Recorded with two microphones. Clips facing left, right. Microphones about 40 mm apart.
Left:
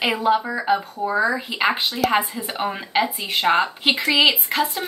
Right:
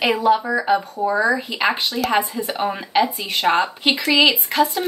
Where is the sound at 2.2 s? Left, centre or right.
Left.